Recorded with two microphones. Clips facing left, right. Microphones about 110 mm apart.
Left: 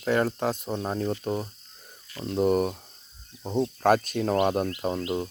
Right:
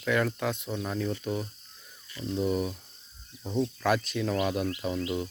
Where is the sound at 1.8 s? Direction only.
55° left (ahead or behind).